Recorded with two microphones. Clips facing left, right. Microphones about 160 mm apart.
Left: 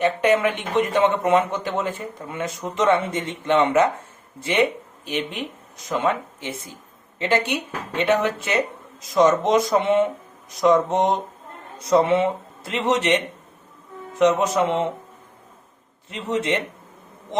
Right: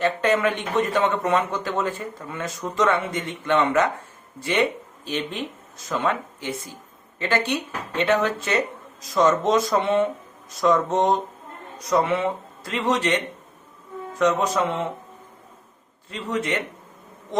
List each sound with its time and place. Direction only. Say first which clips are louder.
0.0 s speech: left 2 dB; 15° left (ahead or behind)
16.0 s speech: left 3 dB; 20° left (ahead or behind)